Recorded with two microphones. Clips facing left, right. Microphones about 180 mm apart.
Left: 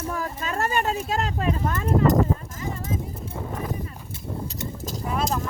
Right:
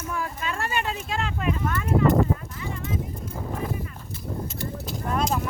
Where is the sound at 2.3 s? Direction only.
40° left (ahead or behind).